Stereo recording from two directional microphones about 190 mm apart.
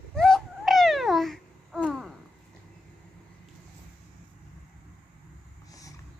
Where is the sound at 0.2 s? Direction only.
Centre (ahead or behind).